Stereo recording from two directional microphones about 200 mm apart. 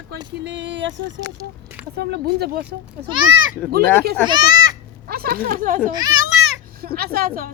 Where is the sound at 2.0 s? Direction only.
55° right (ahead or behind).